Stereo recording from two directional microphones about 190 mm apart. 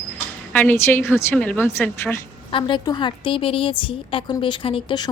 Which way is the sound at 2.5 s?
25° left (ahead or behind).